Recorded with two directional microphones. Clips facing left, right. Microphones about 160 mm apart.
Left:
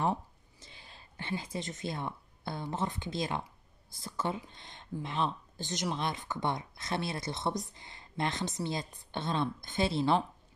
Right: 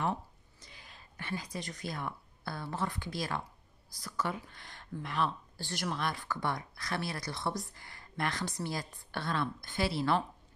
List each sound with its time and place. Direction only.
0.0 s speech: 30° left (ahead or behind)